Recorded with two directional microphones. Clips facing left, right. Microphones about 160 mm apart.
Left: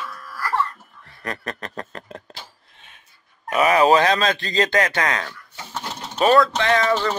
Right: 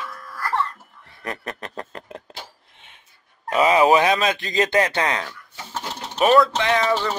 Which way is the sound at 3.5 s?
20° right (ahead or behind).